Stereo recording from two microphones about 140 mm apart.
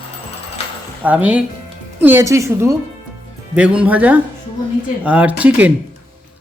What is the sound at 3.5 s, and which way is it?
Speech, 10° right (ahead or behind).